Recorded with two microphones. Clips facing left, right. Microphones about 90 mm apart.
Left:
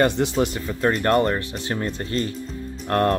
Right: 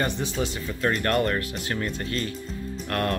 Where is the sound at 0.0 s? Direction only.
80° left.